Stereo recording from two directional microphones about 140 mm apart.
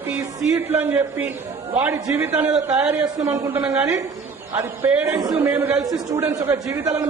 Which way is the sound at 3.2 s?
25° right (ahead or behind).